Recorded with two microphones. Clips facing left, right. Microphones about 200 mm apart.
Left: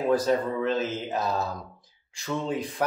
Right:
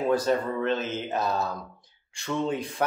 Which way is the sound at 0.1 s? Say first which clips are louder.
Left 2 dB; centre (ahead or behind).